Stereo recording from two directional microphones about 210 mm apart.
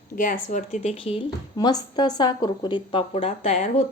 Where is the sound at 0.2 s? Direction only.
35° left (ahead or behind).